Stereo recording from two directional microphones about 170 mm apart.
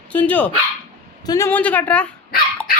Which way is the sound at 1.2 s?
20° left (ahead or behind).